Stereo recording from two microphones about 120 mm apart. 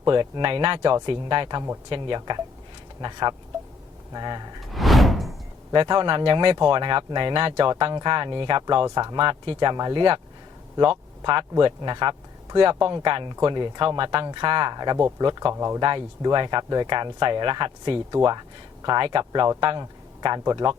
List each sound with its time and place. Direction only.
0.1 s speech: 40° right (ahead or behind)
4.6 s door: centre (ahead or behind)
5.7 s speech: 40° right (ahead or behind)
11.2 s speech: 40° right (ahead or behind); by 15.8 s 25° right (ahead or behind)
15.8 s speech: 35° right (ahead or behind)
19.8 s a sound: 35° right (ahead or behind)
20.4 s speech: 30° right (ahead or behind)